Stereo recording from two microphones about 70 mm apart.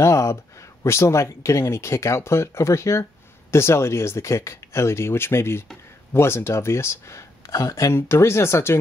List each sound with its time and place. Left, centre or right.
0.0 s speech: left